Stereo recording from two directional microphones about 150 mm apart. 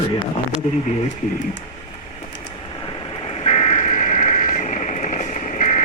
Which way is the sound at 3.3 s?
45° left (ahead or behind).